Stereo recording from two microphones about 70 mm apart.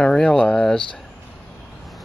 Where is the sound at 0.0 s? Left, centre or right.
Centre.